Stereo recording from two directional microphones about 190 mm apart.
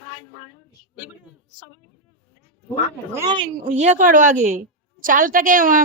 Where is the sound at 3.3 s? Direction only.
30° right (ahead or behind).